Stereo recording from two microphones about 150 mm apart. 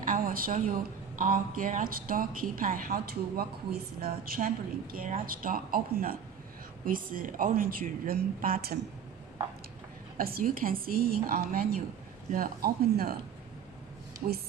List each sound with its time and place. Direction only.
0.0 s a sound: 65° right (ahead or behind)
1.2 s a woman's voice: 65° right (ahead or behind); by 8.8 s 80° right
10.2 s a woman's voice: 75° right (ahead or behind)
14.2 s speech: 55° right (ahead or behind)